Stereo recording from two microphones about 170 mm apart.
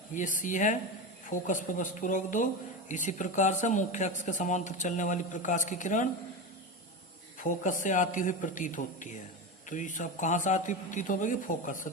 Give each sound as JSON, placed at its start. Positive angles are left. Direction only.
{"t": 0.1, "sound": "a man's voice", "side_deg": 50}
{"t": 7.3, "sound": "a man's voice", "side_deg": 50}